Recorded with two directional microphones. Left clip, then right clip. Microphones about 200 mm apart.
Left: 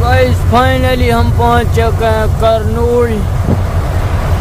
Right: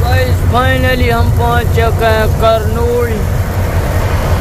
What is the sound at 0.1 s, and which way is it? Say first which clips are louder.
Vehicle: left 6 dB; 30° left (ahead or behind).